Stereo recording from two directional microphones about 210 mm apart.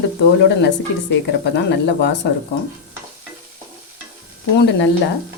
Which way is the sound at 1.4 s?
55° left (ahead or behind).